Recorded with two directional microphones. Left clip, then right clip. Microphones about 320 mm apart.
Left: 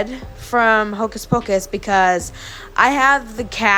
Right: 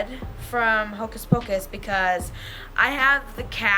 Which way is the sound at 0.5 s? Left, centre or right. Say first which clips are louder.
Left 7 dB; centre.